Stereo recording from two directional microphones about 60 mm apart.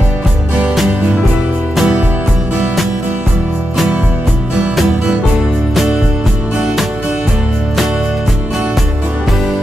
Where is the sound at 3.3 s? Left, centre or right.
Centre.